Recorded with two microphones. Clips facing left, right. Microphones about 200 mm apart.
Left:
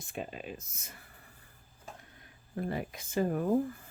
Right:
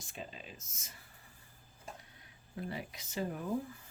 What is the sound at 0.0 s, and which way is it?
Speech, 55° left (ahead or behind).